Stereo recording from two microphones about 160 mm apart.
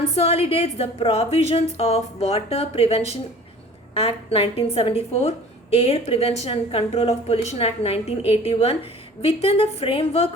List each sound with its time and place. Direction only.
0.0 s a woman's voice: 40° left (ahead or behind)